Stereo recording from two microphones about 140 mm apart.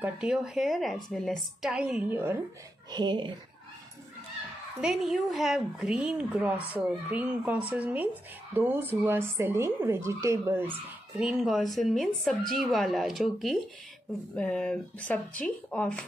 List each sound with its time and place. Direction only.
0.0 s speech: 5° right (ahead or behind)
2.9 s speech: 30° right (ahead or behind)
4.8 s speech: 5° right (ahead or behind); by 10.6 s 20° right (ahead or behind)
11.1 s speech: 5° right (ahead or behind)